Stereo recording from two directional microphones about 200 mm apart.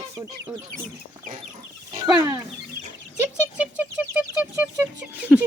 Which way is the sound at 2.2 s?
20° right (ahead or behind).